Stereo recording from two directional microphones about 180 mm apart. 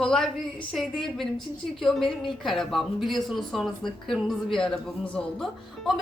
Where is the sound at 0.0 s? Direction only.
5° left (ahead or behind).